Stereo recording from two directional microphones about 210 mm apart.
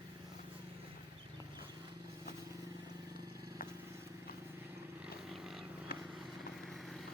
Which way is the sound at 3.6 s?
45° left (ahead or behind).